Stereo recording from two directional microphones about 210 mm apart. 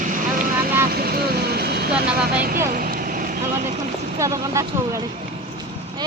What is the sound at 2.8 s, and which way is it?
Vehicle, 45° right (ahead or behind).